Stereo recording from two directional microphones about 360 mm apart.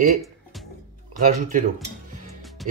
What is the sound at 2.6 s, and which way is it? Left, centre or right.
Music, centre.